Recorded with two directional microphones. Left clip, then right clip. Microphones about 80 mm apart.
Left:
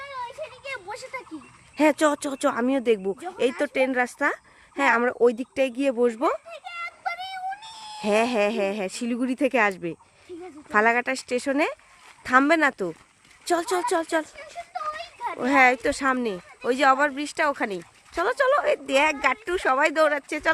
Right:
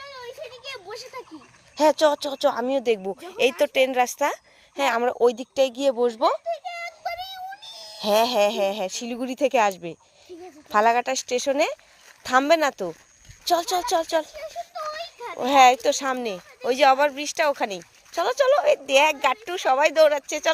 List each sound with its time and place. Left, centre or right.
0.6 s a sound: left
1.7 s speech: left
2.0 s speech: left
3.2 s speech: centre
4.7 s speech: centre; by 7.3 s left
8.0 s speech: centre
14.3 s a sound: left
15.4 s speech: centre